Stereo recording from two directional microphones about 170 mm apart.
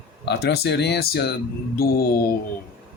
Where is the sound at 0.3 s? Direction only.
75° left (ahead or behind).